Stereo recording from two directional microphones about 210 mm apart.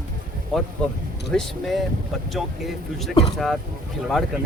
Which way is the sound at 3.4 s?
Centre (ahead or behind).